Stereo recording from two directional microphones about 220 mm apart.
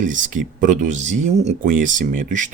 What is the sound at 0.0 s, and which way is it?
Speech, 35° right (ahead or behind).